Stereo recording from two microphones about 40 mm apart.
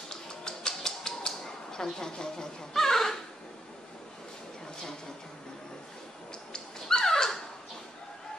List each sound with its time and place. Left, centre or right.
0.1 s a sound: centre
2.0 s speech: centre
6.5 s dog: centre